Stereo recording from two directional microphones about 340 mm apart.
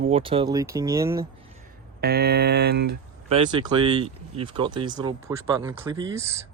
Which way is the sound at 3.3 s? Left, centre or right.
Centre.